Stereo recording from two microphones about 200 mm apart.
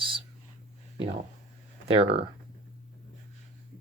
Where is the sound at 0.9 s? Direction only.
30° right (ahead or behind).